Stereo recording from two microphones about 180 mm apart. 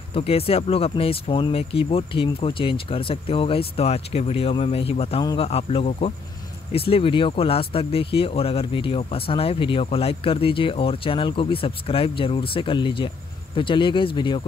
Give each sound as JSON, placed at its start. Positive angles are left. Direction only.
{"t": 0.1, "sound": "speech", "side_deg": 30}